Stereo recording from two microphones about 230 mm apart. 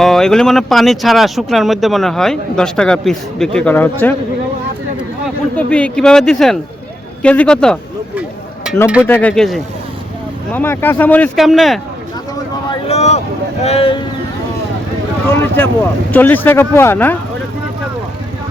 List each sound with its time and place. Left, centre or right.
0.0 s speech: centre
5.5 s speech: centre
8.7 s a sound: centre
9.0 s speech: centre
12.7 s speech: left
15.3 s speech: centre